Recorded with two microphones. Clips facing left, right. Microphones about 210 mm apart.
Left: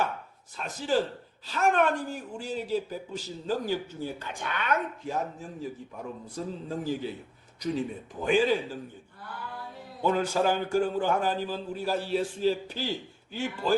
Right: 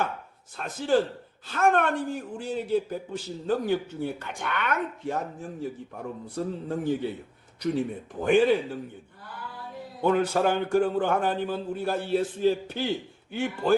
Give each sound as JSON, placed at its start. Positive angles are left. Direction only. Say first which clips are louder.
{"t": 0.5, "sound": "speech", "louder": "right 4 dB", "side_deg": -55}
{"t": 6.3, "sound": "speech", "louder": "right 4 dB", "side_deg": -60}
{"t": 10.0, "sound": "speech", "louder": "right 3 dB", "side_deg": -60}